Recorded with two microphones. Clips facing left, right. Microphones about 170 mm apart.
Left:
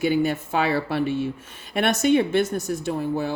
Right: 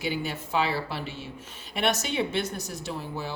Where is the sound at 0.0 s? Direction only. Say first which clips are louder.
Left 10 dB; 50° left (ahead or behind).